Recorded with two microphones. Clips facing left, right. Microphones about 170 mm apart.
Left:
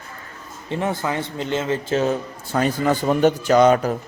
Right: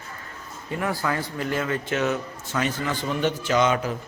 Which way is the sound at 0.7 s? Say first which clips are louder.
Left 3 dB; 25° left (ahead or behind).